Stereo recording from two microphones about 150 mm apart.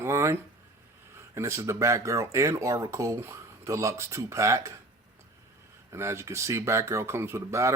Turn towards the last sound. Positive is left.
turn(degrees=-20)  # may be behind; listen again after turning